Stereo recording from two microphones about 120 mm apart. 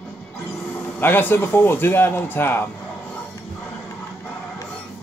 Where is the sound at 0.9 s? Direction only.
15° left (ahead or behind).